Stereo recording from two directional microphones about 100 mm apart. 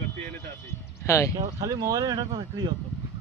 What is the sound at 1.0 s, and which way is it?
Speech, 30° left (ahead or behind).